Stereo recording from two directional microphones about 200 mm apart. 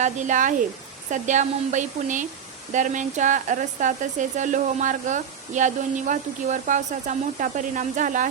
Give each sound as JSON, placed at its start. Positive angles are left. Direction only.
{"t": 0.0, "sound": "speech", "side_deg": -40}